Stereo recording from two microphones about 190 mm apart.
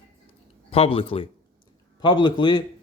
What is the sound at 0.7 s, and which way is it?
A man's voice, 30° left (ahead or behind).